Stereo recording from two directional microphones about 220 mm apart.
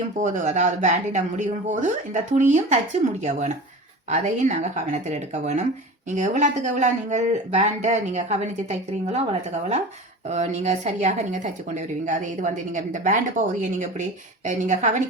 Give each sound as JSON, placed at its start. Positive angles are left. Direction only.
{"t": 0.2, "sound": "speech", "side_deg": -35}
{"t": 10.2, "sound": "speech", "side_deg": -30}